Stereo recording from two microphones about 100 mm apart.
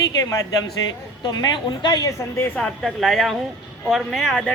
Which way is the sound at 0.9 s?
45° left (ahead or behind).